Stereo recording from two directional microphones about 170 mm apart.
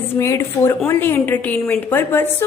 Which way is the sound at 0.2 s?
15° left (ahead or behind).